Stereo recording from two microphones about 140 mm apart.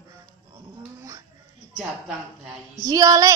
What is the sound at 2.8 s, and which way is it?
Speech, 25° right (ahead or behind).